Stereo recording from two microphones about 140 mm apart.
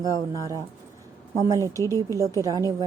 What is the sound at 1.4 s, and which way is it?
A woman's voice, 20° right (ahead or behind).